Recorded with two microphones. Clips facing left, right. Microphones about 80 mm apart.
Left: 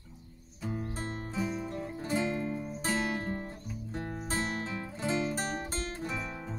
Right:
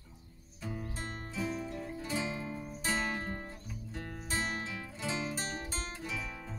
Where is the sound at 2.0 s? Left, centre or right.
Left.